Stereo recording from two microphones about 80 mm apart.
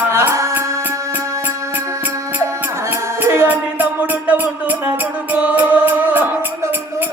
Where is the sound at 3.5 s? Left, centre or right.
Centre.